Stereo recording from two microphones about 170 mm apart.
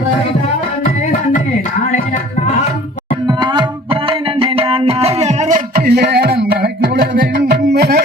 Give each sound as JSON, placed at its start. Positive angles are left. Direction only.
{"t": 3.2, "sound": "music", "side_deg": -25}
{"t": 5.7, "sound": "music", "side_deg": -65}